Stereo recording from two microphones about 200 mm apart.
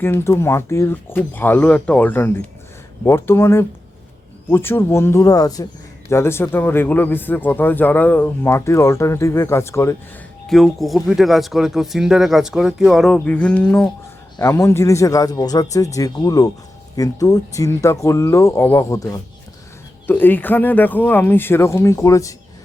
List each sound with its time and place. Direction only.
0.0 s a man's voice: 10° left (ahead or behind)
10.4 s a man's voice: centre (ahead or behind)